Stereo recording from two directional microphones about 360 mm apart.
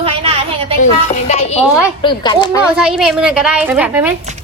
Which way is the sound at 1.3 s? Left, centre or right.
Centre.